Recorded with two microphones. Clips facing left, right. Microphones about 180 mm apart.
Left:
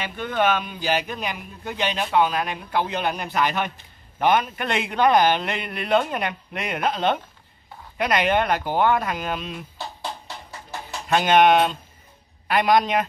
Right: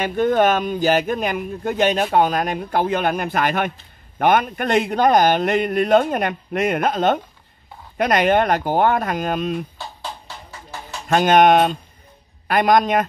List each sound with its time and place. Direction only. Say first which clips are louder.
0.0 s speech: right 7 dB; 45° right (ahead or behind)
11.1 s speech: right 3 dB; 45° right (ahead or behind)